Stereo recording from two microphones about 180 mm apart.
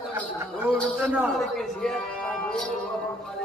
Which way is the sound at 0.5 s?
10° right (ahead or behind).